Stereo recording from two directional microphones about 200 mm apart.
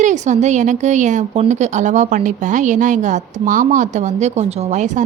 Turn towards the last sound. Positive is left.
turn(degrees=-35)  # may be behind; listen again after turning